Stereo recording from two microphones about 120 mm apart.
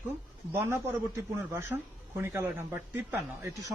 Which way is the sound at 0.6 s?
20° right (ahead or behind).